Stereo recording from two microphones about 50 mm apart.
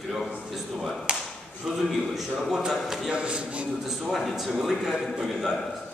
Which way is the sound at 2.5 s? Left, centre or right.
Centre.